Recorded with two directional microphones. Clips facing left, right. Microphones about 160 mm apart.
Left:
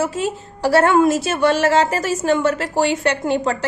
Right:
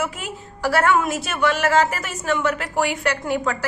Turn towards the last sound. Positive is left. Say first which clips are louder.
# left 4 dB
turn(degrees=25)  # may be behind; listen again after turning